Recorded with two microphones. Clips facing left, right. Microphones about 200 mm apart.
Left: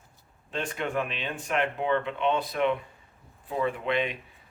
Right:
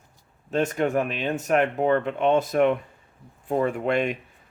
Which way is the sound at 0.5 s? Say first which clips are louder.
Right 7 dB; 45° right (ahead or behind).